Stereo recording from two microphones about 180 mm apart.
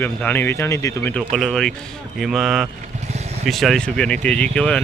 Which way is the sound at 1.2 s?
Centre (ahead or behind).